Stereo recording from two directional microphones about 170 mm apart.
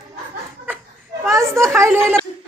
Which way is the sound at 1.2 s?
15° right (ahead or behind).